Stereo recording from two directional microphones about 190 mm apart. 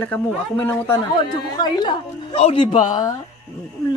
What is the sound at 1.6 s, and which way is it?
A woman's voice, 25° left (ahead or behind).